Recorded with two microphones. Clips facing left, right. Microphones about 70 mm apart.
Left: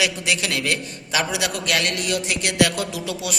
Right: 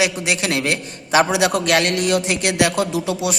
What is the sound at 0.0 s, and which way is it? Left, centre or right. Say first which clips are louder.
A man's voice: right 3 dB; right.